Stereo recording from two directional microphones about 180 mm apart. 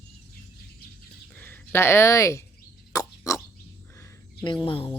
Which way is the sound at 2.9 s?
20° left (ahead or behind).